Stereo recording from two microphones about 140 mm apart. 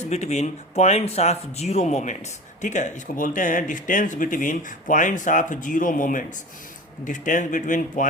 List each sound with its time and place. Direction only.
0.0 s speech: 55° left (ahead or behind); by 6.2 s 75° left (ahead or behind)
7.0 s speech: 65° left (ahead or behind)